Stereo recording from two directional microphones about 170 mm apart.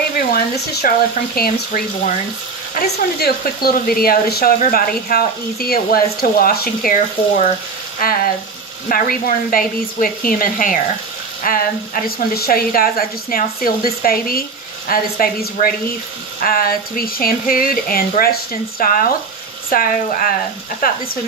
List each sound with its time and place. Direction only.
0.3 s speech: 60° left (ahead or behind)